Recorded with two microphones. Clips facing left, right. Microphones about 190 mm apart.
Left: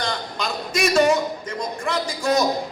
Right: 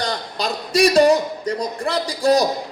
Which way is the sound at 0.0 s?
35° right (ahead or behind).